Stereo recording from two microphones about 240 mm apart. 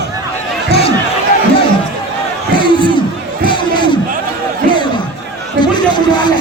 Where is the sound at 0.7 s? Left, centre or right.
Left.